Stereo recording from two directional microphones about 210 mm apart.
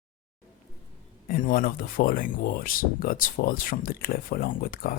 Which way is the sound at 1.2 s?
40° left (ahead or behind).